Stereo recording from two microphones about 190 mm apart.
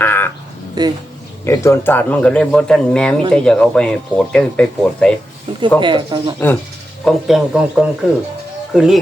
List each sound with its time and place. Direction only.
0.0 s speech: 10° left (ahead or behind)
0.8 s speech: 20° right (ahead or behind)
1.5 s speech: 15° left (ahead or behind)
5.5 s a sound: 30° right (ahead or behind)
5.8 s speech: 25° right (ahead or behind)
7.0 s speech: centre (ahead or behind)